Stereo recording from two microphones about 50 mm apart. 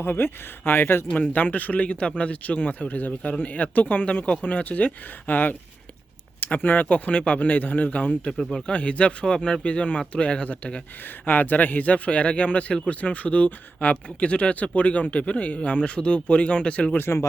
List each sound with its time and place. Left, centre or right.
0.0 s speech: left
1.1 s speech: left
8.3 s speech: centre
8.7 s speech: left
11.3 s speech: left